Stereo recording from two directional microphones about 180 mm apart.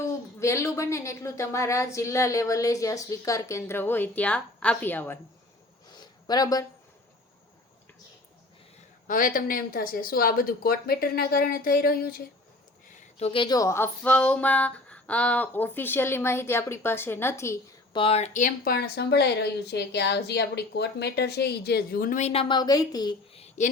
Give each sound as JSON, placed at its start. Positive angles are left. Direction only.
{"t": 0.0, "sound": "a woman's voice", "side_deg": 15}
{"t": 5.9, "sound": "a sound", "side_deg": 25}
{"t": 9.0, "sound": "speech", "side_deg": 50}
{"t": 13.1, "sound": "a woman's voice", "side_deg": 30}
{"t": 17.9, "sound": "speech", "side_deg": 30}
{"t": 23.3, "sound": "a sound", "side_deg": 35}